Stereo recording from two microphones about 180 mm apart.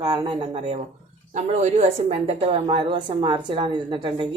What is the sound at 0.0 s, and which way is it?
A woman's voice, 25° right (ahead or behind).